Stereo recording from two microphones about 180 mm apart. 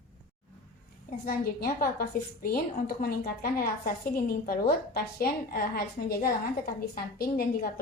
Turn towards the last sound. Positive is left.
turn(degrees=55)  # may be behind; listen again after turning